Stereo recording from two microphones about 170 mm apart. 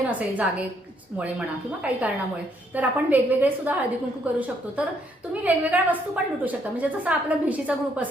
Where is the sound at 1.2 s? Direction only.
10° right (ahead or behind).